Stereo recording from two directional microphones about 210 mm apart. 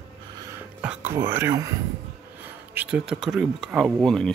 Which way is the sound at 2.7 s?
5° right (ahead or behind).